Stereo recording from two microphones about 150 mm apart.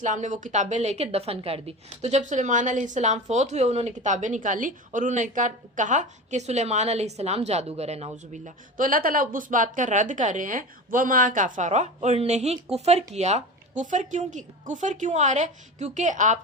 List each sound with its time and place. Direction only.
0.0 s a woman's voice: 55° right (ahead or behind)